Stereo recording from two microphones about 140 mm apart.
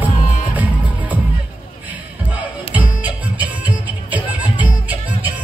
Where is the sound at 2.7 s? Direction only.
10° right (ahead or behind).